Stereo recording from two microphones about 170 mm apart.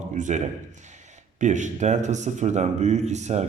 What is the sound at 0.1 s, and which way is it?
A man's voice, 45° right (ahead or behind).